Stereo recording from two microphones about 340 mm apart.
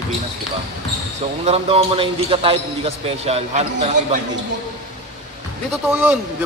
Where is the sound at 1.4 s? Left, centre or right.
Centre.